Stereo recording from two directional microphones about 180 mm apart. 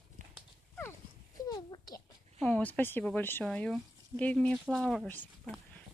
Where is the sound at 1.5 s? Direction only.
20° left (ahead or behind).